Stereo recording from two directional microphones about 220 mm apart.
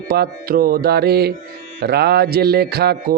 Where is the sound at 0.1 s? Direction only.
40° right (ahead or behind).